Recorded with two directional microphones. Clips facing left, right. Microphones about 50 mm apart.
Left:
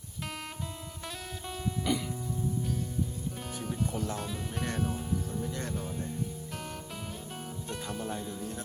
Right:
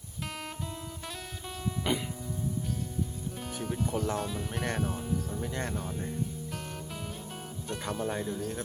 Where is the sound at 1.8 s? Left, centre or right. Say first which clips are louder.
Even; right.